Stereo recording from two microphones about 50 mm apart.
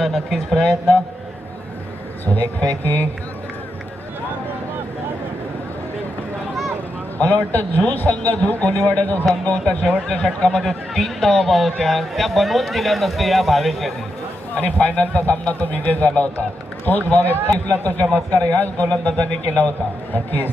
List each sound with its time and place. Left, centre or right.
0.0 s a man's voice: centre
2.2 s a man's voice: left
7.2 s a man's voice: left
10.6 s a man's voice: centre
14.5 s a man's voice: left
20.2 s a man's voice: left